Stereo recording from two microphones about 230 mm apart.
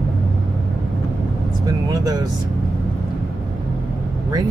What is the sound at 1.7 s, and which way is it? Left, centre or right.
Speech, centre.